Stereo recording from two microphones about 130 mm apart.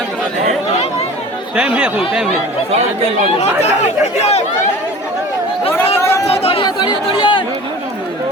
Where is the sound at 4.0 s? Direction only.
55° left (ahead or behind).